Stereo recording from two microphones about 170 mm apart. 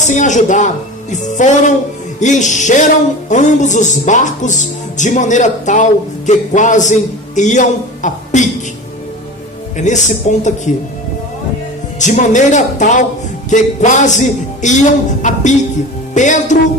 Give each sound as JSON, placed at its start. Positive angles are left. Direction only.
{"t": 0.0, "sound": "music", "side_deg": 45}
{"t": 9.7, "sound": "music", "side_deg": 45}
{"t": 11.9, "sound": "music", "side_deg": 45}